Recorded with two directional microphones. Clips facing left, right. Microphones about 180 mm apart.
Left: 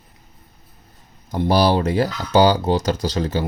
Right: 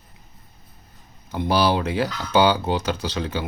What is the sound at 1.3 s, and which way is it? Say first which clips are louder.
Speech: left 3 dB; 40° left (ahead or behind).